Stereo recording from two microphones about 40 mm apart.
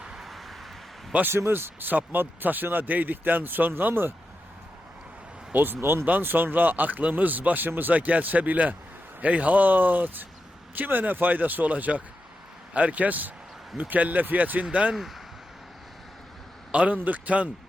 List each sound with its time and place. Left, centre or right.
0.0 s vehicle: centre
0.3 s vehicle: centre
1.3 s speech: right
1.9 s speech: right
5.7 s speech: right
6.1 s speech: right
14.6 s speech: right
16.7 s speech: right